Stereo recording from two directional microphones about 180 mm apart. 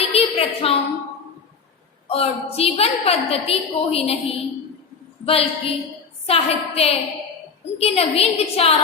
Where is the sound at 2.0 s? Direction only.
30° left (ahead or behind).